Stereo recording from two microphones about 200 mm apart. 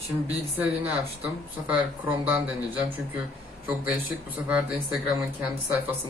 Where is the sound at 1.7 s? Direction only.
10° right (ahead or behind).